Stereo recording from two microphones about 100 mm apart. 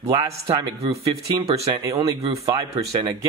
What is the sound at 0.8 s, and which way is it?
Speech, 90° right.